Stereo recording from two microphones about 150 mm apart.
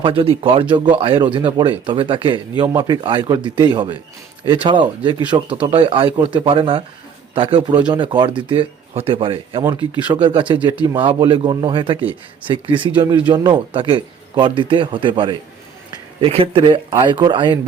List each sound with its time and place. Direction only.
0.0 s speech: 35° right (ahead or behind)